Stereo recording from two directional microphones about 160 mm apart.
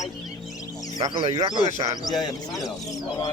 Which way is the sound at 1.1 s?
40° right (ahead or behind).